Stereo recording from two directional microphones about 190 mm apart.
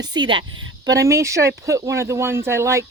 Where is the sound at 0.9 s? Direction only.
15° right (ahead or behind).